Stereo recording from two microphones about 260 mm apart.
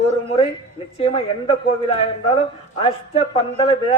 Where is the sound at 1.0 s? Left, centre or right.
Left.